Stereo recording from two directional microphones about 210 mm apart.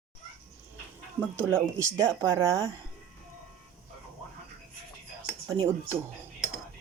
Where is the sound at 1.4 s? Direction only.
10° right (ahead or behind).